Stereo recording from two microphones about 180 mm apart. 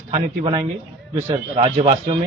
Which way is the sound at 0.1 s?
30° right (ahead or behind).